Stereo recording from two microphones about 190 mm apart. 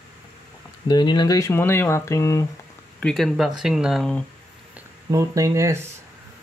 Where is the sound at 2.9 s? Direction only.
5° left (ahead or behind).